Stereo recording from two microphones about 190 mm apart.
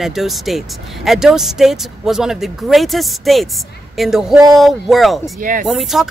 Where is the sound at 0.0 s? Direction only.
Centre (ahead or behind).